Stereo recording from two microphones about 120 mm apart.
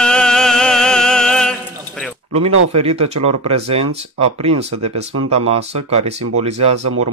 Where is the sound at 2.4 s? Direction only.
60° right (ahead or behind).